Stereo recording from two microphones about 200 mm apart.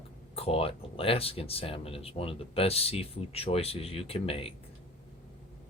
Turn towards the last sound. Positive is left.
turn(degrees=30)  # may be behind; listen again after turning